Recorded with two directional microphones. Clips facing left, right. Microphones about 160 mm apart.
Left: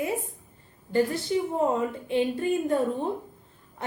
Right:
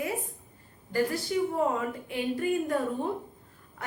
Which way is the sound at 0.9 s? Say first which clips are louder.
Left 4 dB; 25° left (ahead or behind).